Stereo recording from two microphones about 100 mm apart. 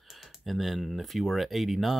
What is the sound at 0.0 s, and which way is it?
Speech, centre (ahead or behind).